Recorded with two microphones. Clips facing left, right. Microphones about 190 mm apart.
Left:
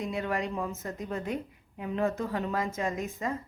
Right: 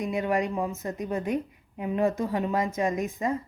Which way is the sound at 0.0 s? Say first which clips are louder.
Right 5 dB; 15° right (ahead or behind).